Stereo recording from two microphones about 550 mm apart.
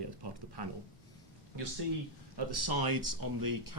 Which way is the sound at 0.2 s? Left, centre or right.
Right.